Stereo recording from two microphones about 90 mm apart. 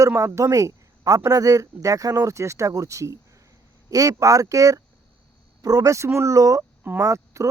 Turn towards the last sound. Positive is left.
turn(degrees=-35)  # may be behind; listen again after turning